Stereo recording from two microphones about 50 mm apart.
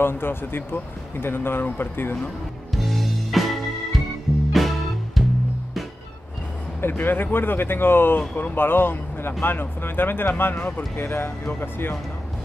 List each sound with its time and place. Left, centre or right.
0.0 s speech: left
2.7 s music: centre
6.8 s speech: left